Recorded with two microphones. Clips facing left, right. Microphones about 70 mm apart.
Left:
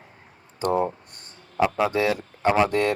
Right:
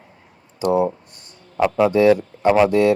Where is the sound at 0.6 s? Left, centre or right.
Left.